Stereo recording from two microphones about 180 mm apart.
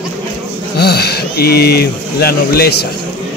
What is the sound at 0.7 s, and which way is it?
A man's voice, 65° left (ahead or behind).